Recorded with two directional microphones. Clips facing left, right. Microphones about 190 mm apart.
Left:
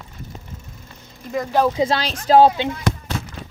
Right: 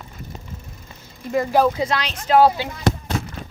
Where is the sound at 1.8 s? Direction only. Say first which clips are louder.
Left 3 dB; 30° left (ahead or behind).